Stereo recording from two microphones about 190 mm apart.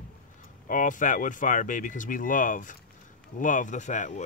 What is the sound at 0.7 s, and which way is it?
Speech, 45° left (ahead or behind).